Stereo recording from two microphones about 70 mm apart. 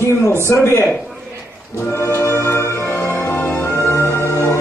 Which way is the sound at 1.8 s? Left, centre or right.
Left.